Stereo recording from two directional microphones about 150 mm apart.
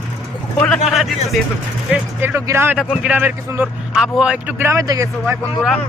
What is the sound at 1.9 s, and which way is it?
Speech, 15° right (ahead or behind).